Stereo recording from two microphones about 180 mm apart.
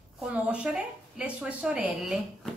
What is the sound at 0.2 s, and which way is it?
A woman's voice, 5° right (ahead or behind).